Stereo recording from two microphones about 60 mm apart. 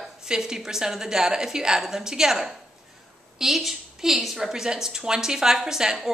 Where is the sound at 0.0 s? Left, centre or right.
Centre.